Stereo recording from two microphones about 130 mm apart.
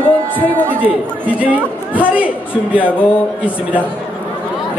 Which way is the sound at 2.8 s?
15° left (ahead or behind).